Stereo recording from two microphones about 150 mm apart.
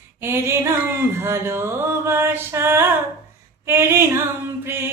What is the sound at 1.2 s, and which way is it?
Singing, 15° right (ahead or behind).